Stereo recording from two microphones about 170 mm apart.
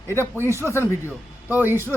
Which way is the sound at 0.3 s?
15° right (ahead or behind).